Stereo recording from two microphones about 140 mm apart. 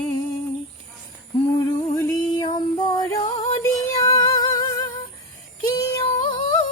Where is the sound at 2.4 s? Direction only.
30° left (ahead or behind).